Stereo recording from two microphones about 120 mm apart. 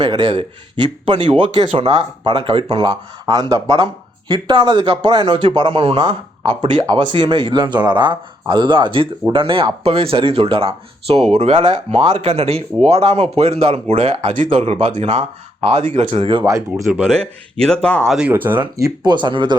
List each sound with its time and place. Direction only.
0.0 s speech: 35° right (ahead or behind); by 13.9 s 55° right (ahead or behind)
14.2 s speech: 80° right; by 15.9 s 60° right (ahead or behind)
16.1 s speech: 50° right (ahead or behind)
17.1 s speech: 5° left (ahead or behind)
18.2 s speech: 15° right (ahead or behind)
18.8 s speech: 35° right (ahead or behind)